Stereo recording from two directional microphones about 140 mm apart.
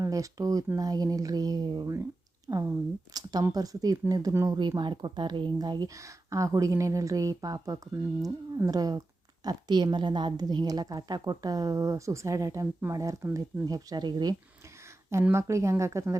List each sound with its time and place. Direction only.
0.0 s speech: 25° right (ahead or behind)